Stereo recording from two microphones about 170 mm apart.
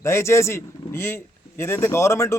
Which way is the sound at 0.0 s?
15° left (ahead or behind).